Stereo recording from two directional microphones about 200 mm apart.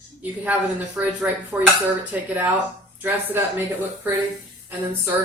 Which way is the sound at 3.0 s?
10° right (ahead or behind).